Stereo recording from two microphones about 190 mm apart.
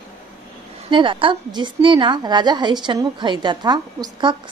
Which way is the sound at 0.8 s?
25° right (ahead or behind).